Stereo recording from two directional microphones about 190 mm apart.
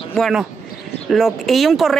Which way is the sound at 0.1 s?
Centre (ahead or behind).